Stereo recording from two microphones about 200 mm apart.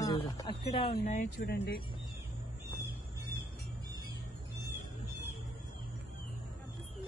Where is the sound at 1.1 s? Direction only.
45° left (ahead or behind).